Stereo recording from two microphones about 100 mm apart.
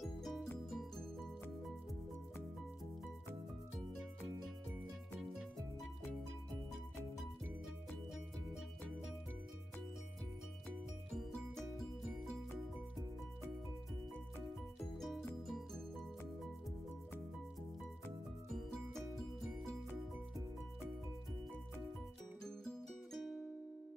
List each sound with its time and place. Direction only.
0.0 s music: 5° left (ahead or behind)
15.0 s music: 5° left (ahead or behind)
22.4 s music: 5° left (ahead or behind)